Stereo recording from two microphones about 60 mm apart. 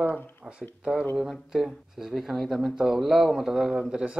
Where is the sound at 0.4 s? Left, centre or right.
Right.